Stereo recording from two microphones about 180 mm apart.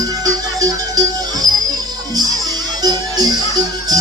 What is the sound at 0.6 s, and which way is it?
Music, 20° right (ahead or behind).